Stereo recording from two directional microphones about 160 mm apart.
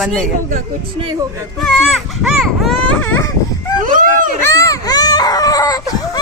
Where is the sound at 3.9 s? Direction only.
60° right (ahead or behind).